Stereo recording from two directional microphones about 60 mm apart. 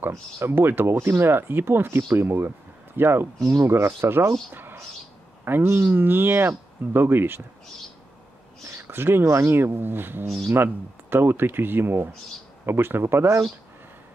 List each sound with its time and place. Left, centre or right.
0.1 s speech: right
3.3 s speech: right
5.4 s speech: right
8.7 s speech: right